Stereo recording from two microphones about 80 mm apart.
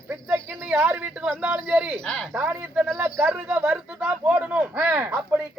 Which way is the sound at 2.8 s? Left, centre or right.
Right.